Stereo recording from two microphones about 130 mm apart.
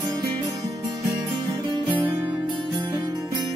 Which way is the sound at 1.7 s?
35° right (ahead or behind).